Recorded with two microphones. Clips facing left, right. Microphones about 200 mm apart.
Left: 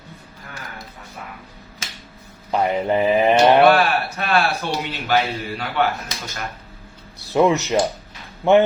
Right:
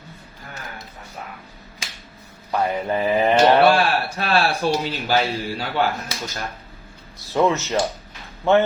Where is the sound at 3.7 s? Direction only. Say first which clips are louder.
Left 1 dB; 30° right (ahead or behind).